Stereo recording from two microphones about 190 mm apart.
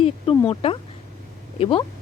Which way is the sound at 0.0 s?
25° left (ahead or behind).